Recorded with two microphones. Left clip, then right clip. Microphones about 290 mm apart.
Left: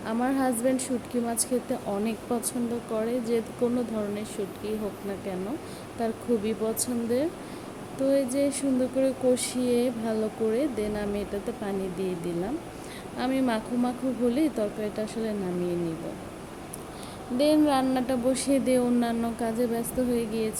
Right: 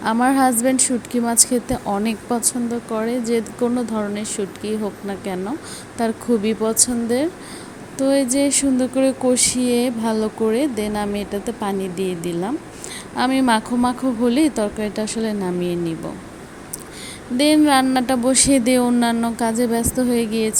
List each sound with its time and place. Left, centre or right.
0.0 s a woman's voice: right
6.0 s a woman's voice: centre
17.3 s a woman's voice: right